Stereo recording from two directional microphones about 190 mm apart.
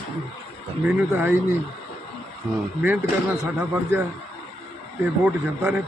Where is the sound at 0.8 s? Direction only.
5° right (ahead or behind).